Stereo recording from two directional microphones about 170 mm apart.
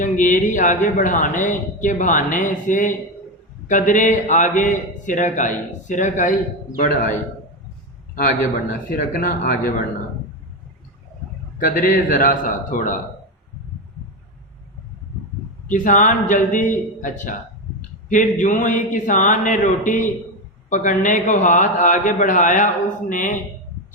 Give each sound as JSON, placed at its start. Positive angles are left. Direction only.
{"t": 0.0, "sound": "a man's voice", "side_deg": 50}
{"t": 11.6, "sound": "speech", "side_deg": 50}
{"t": 15.7, "sound": "speech", "side_deg": 50}